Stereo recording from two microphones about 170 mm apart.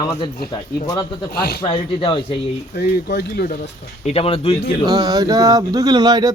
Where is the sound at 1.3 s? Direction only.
65° left (ahead or behind).